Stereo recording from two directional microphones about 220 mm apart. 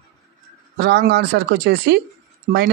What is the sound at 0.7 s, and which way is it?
Speech, 50° right (ahead or behind).